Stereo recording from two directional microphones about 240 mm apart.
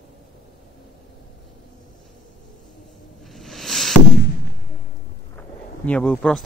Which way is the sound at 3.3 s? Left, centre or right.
Centre.